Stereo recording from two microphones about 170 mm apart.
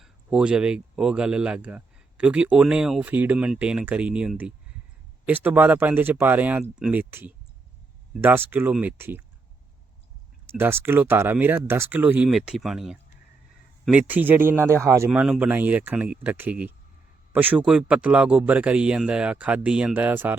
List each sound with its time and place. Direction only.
0.0 s speech: 5° right (ahead or behind)
10.5 s speech: 15° right (ahead or behind)